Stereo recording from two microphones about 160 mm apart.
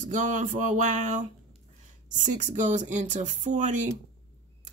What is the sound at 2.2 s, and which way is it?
Speech, 50° right (ahead or behind).